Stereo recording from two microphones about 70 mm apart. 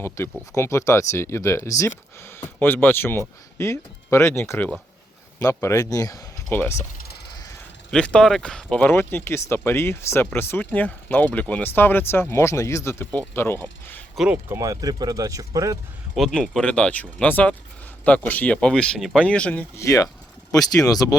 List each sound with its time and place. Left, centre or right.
0.2 s speech: left
2.2 s speech: left
6.5 s speech: left
7.9 s speech: centre
8.9 s speech: left
14.6 s speech: right
16.3 s speech: centre
18.9 s speech: centre
19.2 s speech: centre
19.7 s speech: left